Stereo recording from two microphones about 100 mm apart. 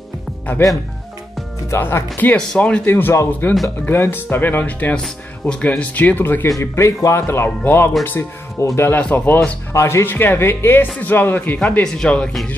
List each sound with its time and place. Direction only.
1.7 s speech: 25° left (ahead or behind)